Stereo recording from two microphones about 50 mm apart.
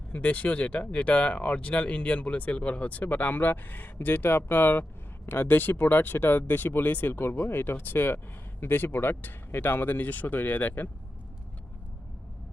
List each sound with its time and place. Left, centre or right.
0.1 s speech: left
7.2 s speech: left